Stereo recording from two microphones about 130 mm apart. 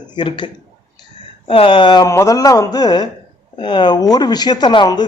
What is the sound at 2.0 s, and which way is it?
Speech, 25° left (ahead or behind).